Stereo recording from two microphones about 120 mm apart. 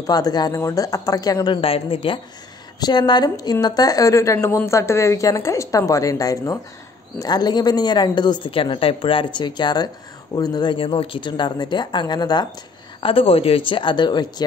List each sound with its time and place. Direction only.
0.0 s a woman's voice: 35° left (ahead or behind)
1.6 s speech: 50° left (ahead or behind)
2.8 s a woman's voice: 35° left (ahead or behind)
13.0 s speech: 50° left (ahead or behind)